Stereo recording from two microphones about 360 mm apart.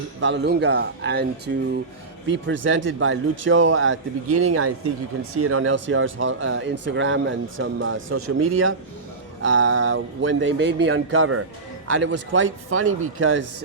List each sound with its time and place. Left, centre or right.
0.2 s a man's voice: right